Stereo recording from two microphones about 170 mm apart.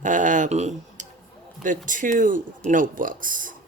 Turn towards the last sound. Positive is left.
turn(degrees=-50)  # may be behind; listen again after turning